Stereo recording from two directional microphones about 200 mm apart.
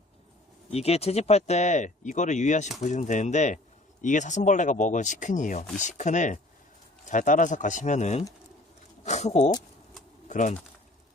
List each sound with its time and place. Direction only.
0.7 s speech: 30° left (ahead or behind)